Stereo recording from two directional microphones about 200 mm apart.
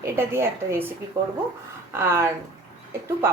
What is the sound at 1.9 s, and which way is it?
Speech, 15° right (ahead or behind).